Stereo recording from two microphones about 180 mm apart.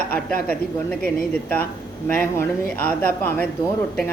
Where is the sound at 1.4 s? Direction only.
10° left (ahead or behind).